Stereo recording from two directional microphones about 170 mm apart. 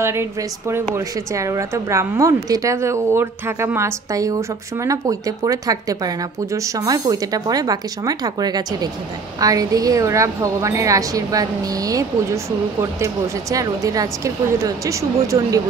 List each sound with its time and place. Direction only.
0.0 s a woman's voice: 15° right (ahead or behind)